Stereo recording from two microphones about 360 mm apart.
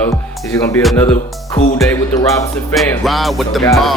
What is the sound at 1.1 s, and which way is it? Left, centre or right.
Speech, centre.